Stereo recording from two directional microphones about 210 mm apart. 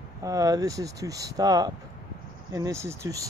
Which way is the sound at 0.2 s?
15° right (ahead or behind).